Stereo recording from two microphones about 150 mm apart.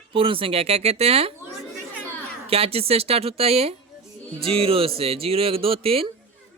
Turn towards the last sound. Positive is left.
turn(degrees=-40)  # may be behind; listen again after turning